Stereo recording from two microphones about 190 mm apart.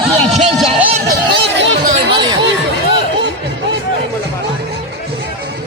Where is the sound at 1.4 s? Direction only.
70° right (ahead or behind).